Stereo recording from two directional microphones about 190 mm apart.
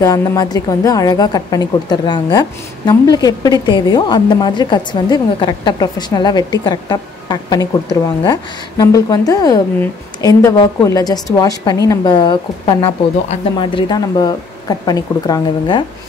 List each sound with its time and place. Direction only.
0.0 s a woman's voice: 15° left (ahead or behind)